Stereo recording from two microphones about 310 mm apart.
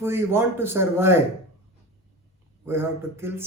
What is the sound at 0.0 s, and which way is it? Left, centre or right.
Speech, centre.